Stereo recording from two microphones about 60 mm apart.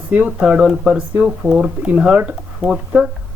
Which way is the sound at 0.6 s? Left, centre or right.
Centre.